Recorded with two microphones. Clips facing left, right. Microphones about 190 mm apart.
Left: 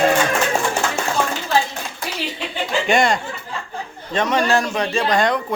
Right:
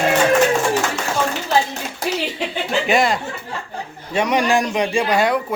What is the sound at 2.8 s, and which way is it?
Speech, centre (ahead or behind).